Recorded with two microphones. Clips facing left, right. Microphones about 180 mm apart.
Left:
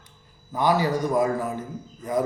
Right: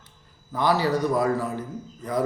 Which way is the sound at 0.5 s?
15° left (ahead or behind).